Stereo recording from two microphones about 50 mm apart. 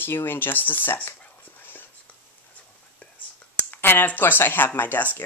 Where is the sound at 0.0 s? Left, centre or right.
Left.